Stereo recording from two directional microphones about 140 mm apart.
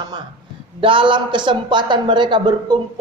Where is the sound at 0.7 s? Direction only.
40° right (ahead or behind).